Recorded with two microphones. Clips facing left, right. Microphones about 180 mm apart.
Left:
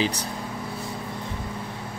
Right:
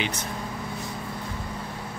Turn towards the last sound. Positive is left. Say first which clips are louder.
# left 4 dB
turn(degrees=35)  # may be behind; listen again after turning